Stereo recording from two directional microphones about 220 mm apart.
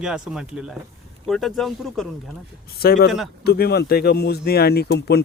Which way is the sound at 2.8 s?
45° left (ahead or behind).